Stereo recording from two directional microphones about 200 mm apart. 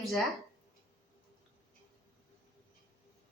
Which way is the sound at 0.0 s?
Centre (ahead or behind).